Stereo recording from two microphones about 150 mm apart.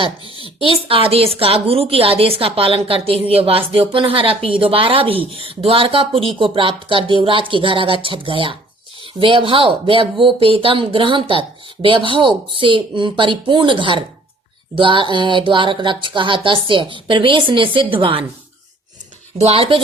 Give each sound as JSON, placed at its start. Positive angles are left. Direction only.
{"t": 0.4, "sound": "a woman's voice", "side_deg": -35}
{"t": 19.4, "sound": "a woman's voice", "side_deg": -40}